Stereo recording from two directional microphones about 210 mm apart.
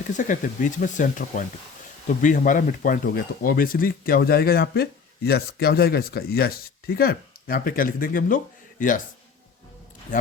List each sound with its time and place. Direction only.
0.2 s speech: 35° left (ahead or behind)
10.1 s speech: 40° left (ahead or behind)